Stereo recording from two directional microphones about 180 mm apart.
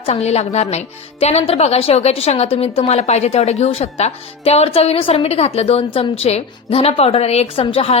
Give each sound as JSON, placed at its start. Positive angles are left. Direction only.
{"t": 0.0, "sound": "speech", "side_deg": 35}